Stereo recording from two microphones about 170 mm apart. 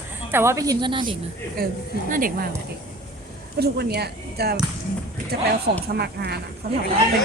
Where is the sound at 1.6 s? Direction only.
65° right (ahead or behind).